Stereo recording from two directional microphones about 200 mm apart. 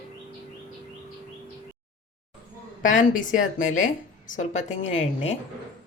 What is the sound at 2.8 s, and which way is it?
A woman's voice, 40° left (ahead or behind).